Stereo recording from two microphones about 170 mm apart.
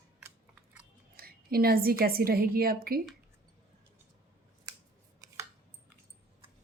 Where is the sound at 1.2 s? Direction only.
60° right (ahead or behind).